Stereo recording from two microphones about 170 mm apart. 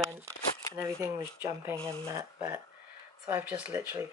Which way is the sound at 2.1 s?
20° right (ahead or behind).